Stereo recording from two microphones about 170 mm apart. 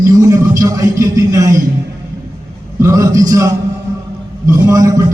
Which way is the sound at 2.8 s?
20° right (ahead or behind).